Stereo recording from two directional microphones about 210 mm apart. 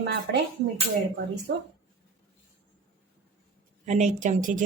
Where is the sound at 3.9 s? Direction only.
35° right (ahead or behind).